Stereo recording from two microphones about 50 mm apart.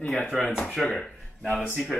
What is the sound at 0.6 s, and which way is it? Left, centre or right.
Speech, centre.